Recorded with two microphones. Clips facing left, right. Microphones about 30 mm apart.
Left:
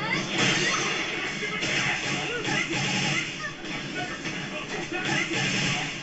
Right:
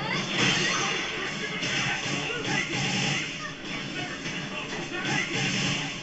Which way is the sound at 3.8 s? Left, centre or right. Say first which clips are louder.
Left 2 dB; right.